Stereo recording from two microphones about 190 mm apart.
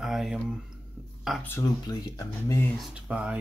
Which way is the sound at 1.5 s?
15° left (ahead or behind).